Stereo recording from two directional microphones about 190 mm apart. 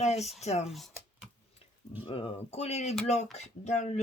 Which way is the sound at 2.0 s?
30° left (ahead or behind).